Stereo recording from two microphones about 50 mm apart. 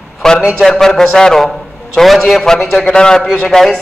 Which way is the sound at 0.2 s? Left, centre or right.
Centre.